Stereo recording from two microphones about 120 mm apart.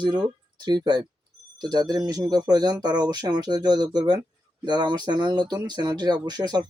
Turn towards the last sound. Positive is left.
turn(degrees=-35)  # may be behind; listen again after turning